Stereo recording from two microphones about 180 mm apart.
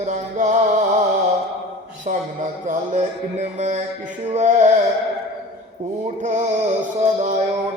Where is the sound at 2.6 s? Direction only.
40° right (ahead or behind).